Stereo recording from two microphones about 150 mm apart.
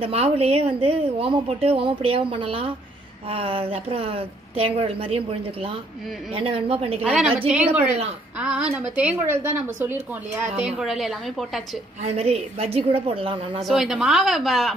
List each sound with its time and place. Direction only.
0.0 s a woman's voice: 40° right (ahead or behind)
7.0 s a woman's voice: 5° right (ahead or behind)
12.0 s a woman's voice: 45° right (ahead or behind)
13.6 s a woman's voice: centre (ahead or behind)